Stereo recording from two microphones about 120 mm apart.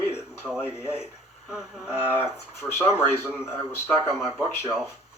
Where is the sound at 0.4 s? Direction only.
5° right (ahead or behind).